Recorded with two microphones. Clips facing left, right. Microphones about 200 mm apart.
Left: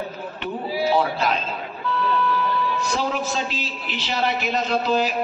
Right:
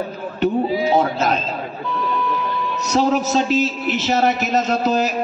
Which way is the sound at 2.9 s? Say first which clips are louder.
Right 7 dB; 40° right (ahead or behind).